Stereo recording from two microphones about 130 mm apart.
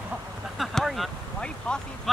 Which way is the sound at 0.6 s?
Centre (ahead or behind).